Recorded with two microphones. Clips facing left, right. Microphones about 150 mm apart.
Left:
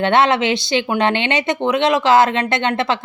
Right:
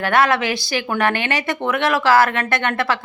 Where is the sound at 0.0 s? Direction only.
25° left (ahead or behind).